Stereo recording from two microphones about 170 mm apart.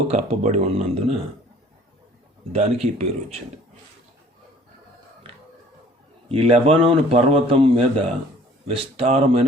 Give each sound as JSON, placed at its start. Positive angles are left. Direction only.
{"t": 0.1, "sound": "a man's voice", "side_deg": -40}
{"t": 2.5, "sound": "a man's voice", "side_deg": -40}
{"t": 6.2, "sound": "a man's voice", "side_deg": -35}